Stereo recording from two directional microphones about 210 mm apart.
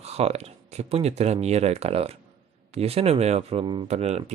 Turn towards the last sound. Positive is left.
turn(degrees=-30)  # may be behind; listen again after turning